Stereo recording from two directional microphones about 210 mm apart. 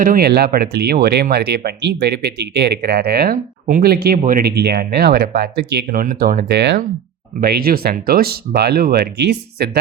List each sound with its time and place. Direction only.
0.0 s speech: 45° right (ahead or behind)